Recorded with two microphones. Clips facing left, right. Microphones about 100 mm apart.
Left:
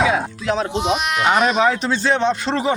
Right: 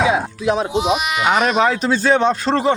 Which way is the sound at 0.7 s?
5° right (ahead or behind).